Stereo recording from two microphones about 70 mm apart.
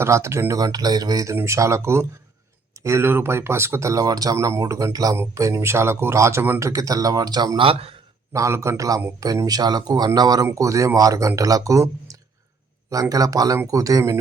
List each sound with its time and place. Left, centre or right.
0.0 s speech: right
0.6 s speech: right
1.5 s speech: right
5.3 s speech: right
6.6 s speech: right
8.3 s speech: right
9.2 s speech: right
10.4 s speech: right